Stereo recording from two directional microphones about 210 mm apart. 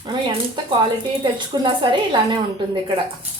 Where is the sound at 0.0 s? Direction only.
20° right (ahead or behind).